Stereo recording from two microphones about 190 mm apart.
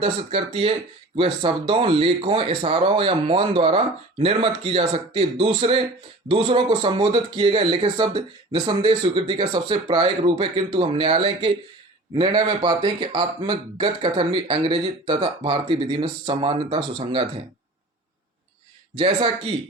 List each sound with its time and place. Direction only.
0.0 s speech: 30° right (ahead or behind)
18.9 s speech: 30° right (ahead or behind)